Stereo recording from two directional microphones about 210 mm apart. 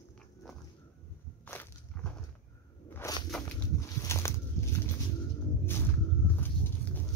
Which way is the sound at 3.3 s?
Centre (ahead or behind).